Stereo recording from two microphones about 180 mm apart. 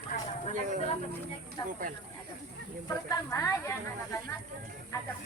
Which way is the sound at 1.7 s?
50° right (ahead or behind).